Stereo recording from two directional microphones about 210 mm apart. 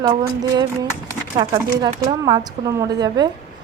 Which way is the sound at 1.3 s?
20° right (ahead or behind).